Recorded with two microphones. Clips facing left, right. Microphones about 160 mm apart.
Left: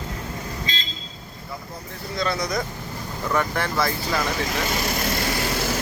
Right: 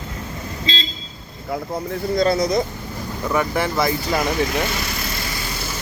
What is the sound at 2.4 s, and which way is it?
Speech, 25° right (ahead or behind).